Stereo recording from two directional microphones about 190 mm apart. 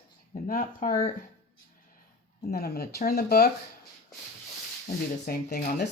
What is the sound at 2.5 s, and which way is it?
Speech, 55° left (ahead or behind).